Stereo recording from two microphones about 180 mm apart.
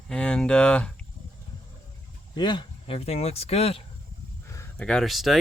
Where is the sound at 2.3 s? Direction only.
25° left (ahead or behind).